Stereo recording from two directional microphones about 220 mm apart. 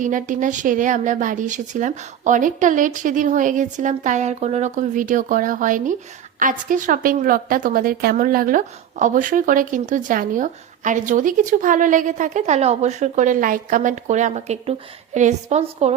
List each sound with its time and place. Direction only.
0.0 s speech: 35° right (ahead or behind)